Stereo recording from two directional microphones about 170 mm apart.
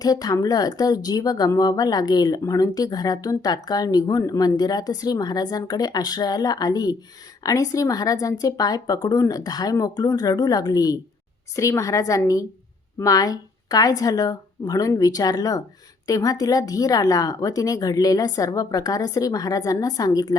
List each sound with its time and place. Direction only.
0.0 s speech: 20° left (ahead or behind)